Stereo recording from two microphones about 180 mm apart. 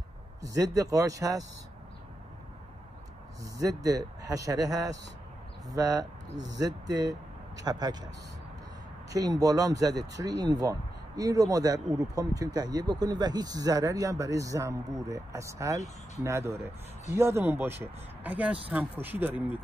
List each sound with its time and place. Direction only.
0.4 s speech: 20° right (ahead or behind)
3.5 s speech: 20° right (ahead or behind)
9.1 s speech: 20° right (ahead or behind)